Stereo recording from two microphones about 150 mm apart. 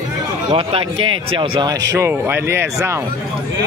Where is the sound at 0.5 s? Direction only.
40° right (ahead or behind).